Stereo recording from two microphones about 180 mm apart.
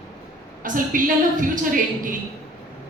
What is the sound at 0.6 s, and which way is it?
Speech, 45° right (ahead or behind).